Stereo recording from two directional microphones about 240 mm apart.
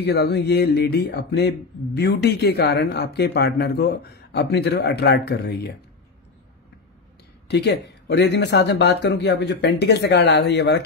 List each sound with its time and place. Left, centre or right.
0.0 s speech: left
7.4 s speech: left